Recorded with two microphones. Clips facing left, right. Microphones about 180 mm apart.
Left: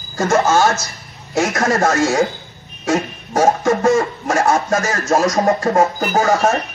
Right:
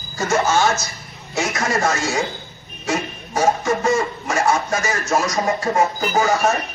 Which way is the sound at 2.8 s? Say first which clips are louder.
Left 5 dB; 50° left (ahead or behind).